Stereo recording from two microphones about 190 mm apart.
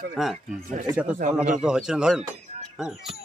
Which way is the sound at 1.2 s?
45° right (ahead or behind).